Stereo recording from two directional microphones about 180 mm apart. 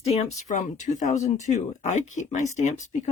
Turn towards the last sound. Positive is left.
turn(degrees=40)  # may be behind; listen again after turning